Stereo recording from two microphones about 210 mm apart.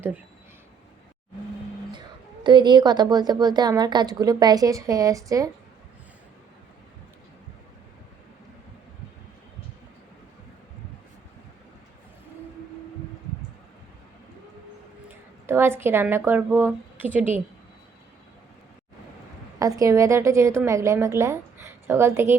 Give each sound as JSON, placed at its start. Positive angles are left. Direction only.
{"t": 1.9, "sound": "a woman's voice", "side_deg": -20}
{"t": 15.4, "sound": "a woman's voice", "side_deg": -10}
{"t": 19.5, "sound": "a woman's voice", "side_deg": -15}